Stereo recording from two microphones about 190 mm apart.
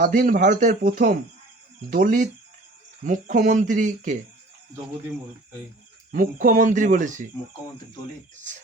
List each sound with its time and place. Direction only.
0.0 s speech: 45° right (ahead or behind)
6.1 s speech: 45° right (ahead or behind)
8.4 s speech: 40° right (ahead or behind)